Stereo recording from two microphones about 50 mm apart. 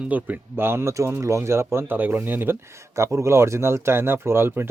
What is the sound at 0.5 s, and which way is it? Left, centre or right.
Speech, right.